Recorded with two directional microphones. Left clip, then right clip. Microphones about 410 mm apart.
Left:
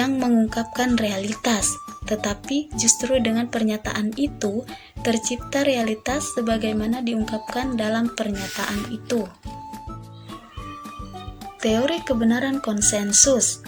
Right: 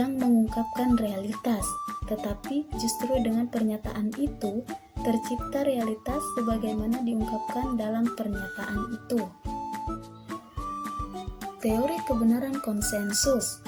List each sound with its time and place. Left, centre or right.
0.0 s speech: right
11.6 s speech: right